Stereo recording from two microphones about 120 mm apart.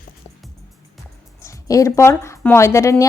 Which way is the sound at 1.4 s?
25° left (ahead or behind).